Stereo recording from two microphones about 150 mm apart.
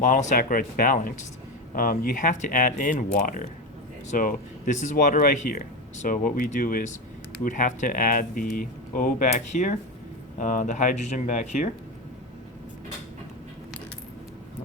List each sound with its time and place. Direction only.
0.0 s speech: 55° left (ahead or behind)
0.3 s speech: 70° left (ahead or behind); by 11.7 s 55° left (ahead or behind)